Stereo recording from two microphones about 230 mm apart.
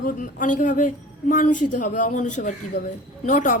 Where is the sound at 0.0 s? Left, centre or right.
Left.